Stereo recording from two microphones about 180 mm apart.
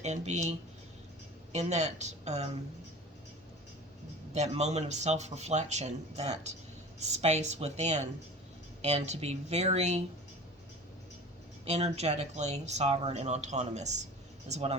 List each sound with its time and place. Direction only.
0.0 s speech: 40° right (ahead or behind)
1.5 s speech: 40° right (ahead or behind)
4.4 s speech: 40° right (ahead or behind)
11.6 s speech: 35° right (ahead or behind)